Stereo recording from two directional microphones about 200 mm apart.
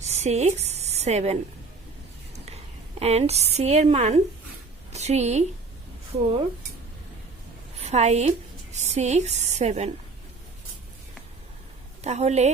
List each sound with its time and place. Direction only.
0.1 s a sound: 35° right (ahead or behind)
3.0 s a woman's voice: 30° right (ahead or behind)
7.9 s a woman's voice: 35° right (ahead or behind)
12.0 s a woman's voice: 35° right (ahead or behind)